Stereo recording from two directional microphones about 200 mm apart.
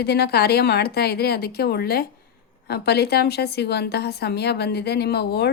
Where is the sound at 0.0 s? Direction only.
55° left (ahead or behind).